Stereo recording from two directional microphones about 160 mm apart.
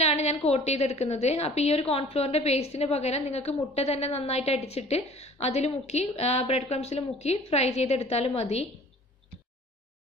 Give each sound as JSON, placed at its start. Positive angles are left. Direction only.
{"t": 0.0, "sound": "a woman's voice", "side_deg": 40}